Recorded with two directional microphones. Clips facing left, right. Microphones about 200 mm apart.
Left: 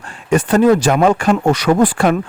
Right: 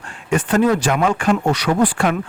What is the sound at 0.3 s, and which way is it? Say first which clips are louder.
Speech: left 5 dB; 40° left (ahead or behind).